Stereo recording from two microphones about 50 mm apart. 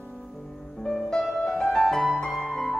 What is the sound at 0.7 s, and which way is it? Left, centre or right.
Music, centre.